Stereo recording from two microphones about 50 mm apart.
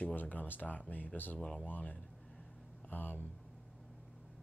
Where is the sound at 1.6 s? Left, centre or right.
Left.